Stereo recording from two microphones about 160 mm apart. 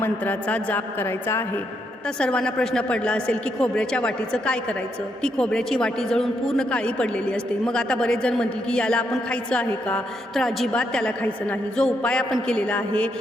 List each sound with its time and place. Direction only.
0.0 s a woman's voice: 10° left (ahead or behind)